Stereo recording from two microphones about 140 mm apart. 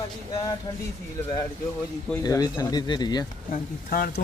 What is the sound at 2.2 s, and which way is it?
Speech, 25° left (ahead or behind).